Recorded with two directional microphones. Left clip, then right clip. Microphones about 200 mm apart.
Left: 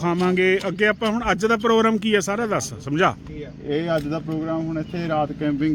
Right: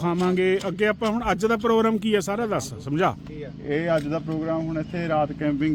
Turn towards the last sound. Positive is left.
turn(degrees=-5)  # may be behind; listen again after turning